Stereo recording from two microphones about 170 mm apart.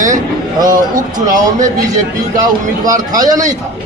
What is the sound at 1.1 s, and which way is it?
Speech, 20° right (ahead or behind).